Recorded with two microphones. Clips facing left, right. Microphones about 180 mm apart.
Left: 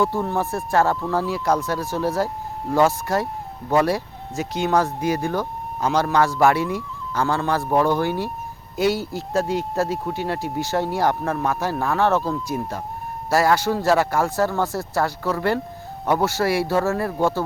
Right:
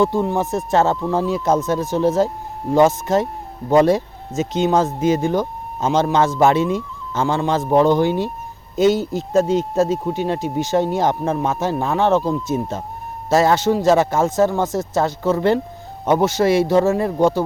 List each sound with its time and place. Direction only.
0.0 s speech: 15° right (ahead or behind)